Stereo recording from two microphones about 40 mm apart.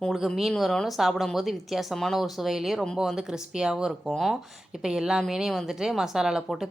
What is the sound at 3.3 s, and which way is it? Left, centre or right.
A woman's voice, centre.